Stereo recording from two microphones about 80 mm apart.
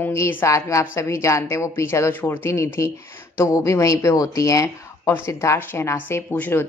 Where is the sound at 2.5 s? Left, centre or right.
Left.